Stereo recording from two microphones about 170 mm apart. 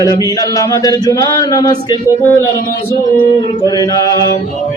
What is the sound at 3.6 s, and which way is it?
Mantra, 25° left (ahead or behind).